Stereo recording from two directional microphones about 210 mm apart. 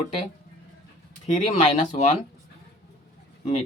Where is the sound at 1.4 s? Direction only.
35° left (ahead or behind).